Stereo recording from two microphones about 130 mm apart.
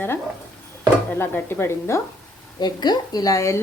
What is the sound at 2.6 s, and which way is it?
Speech, 35° left (ahead or behind).